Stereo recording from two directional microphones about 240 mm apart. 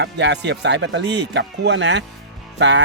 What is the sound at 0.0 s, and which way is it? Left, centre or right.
Speech, right.